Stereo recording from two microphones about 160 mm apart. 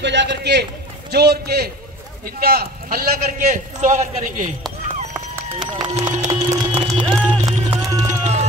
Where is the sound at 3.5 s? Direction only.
50° right (ahead or behind).